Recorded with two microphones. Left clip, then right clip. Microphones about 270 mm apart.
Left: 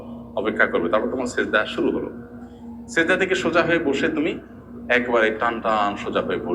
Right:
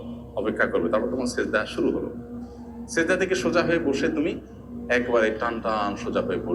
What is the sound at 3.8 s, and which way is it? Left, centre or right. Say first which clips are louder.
Speech: left 3 dB; left.